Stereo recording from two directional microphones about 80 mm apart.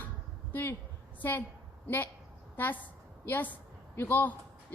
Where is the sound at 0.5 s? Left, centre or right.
Left.